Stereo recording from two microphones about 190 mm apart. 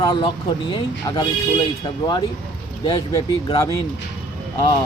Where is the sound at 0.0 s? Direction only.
25° left (ahead or behind).